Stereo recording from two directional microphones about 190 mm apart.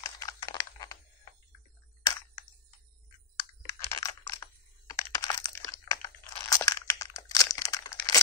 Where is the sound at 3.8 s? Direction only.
20° left (ahead or behind).